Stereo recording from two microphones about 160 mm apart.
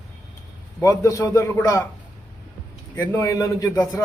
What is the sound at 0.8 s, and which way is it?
A man's voice, 20° left (ahead or behind).